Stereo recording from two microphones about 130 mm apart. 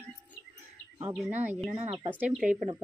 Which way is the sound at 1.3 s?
15° right (ahead or behind).